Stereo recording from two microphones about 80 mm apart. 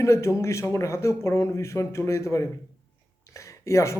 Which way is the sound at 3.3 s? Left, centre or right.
Left.